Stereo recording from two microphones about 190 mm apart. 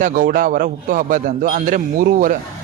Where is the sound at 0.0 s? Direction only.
45° right (ahead or behind).